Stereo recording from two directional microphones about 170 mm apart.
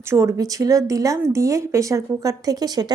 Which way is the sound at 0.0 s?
15° right (ahead or behind).